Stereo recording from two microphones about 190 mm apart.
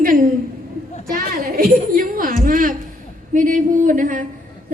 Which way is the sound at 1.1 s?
50° right (ahead or behind).